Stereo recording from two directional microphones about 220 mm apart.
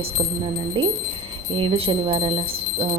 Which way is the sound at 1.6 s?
25° right (ahead or behind).